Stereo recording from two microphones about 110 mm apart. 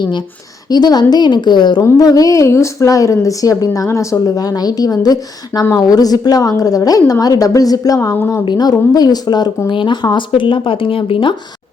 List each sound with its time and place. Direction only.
0.7 s a woman's voice: 40° left (ahead or behind)
1.8 s a woman's voice: 35° left (ahead or behind)
8.1 s a woman's voice: 15° left (ahead or behind)
8.4 s a woman's voice: 35° left (ahead or behind); by 11.3 s 50° left (ahead or behind)